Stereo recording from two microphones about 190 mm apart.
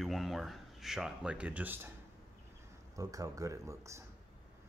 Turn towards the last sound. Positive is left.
turn(degrees=-15)  # may be behind; listen again after turning